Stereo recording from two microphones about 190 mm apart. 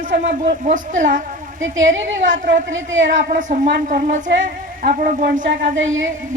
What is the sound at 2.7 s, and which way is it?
Speech, 90° right.